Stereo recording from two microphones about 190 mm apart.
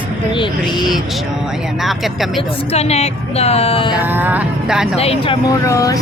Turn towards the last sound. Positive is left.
turn(degrees=15)  # may be behind; listen again after turning